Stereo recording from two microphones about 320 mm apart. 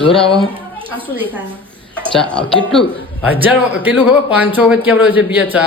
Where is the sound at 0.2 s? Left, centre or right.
Centre.